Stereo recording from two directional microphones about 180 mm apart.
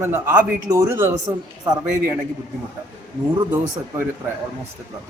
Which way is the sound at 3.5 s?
10° right (ahead or behind).